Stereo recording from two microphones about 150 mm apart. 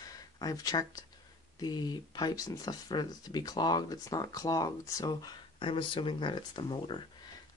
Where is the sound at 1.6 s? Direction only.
25° left (ahead or behind).